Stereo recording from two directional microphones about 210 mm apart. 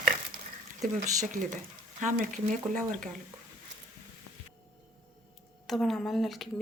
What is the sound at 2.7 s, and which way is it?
Speech, 35° right (ahead or behind).